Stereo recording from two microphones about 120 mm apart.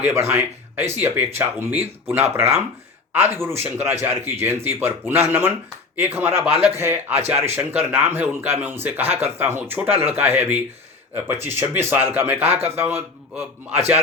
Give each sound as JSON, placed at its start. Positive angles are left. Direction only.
{"t": 0.0, "sound": "speech", "side_deg": -20}
{"t": 3.5, "sound": "speech", "side_deg": -60}
{"t": 3.8, "sound": "speech", "side_deg": -15}